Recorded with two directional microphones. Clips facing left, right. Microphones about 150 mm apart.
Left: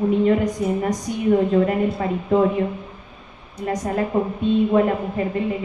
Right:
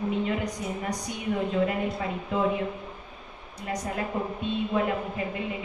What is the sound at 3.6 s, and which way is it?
Speech, 50° left (ahead or behind).